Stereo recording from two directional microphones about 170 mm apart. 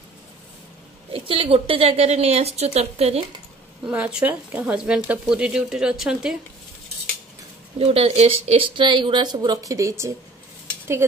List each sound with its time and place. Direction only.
1.1 s speech: 30° right (ahead or behind)
3.8 s speech: 5° right (ahead or behind)
7.8 s speech: 35° right (ahead or behind); by 10.1 s 15° right (ahead or behind)